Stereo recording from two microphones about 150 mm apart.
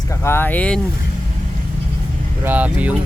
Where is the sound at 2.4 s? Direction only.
10° right (ahead or behind).